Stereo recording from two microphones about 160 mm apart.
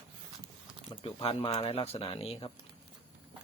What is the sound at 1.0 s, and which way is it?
Speech, 35° left (ahead or behind).